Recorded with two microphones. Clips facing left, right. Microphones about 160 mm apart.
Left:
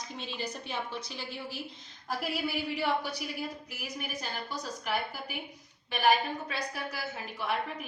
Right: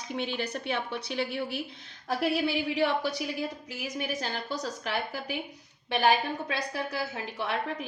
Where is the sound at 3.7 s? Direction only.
90° right.